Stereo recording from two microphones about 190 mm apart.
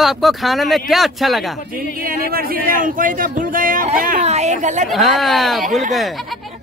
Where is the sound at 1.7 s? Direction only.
50° right (ahead or behind).